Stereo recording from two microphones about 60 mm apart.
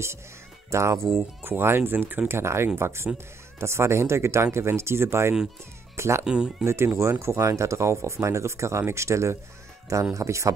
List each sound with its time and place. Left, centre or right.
0.7 s speech: right
1.4 s speech: right
2.2 s speech: right
6.2 s speech: centre
6.6 s speech: right